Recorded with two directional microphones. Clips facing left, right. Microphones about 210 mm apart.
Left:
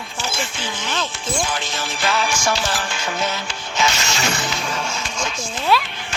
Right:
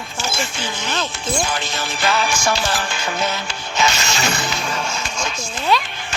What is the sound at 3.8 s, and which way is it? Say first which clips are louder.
Mechanisms: right 1 dB; 40° right (ahead or behind).